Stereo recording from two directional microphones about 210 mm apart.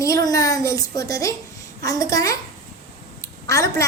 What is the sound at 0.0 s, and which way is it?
A woman's voice, 15° left (ahead or behind).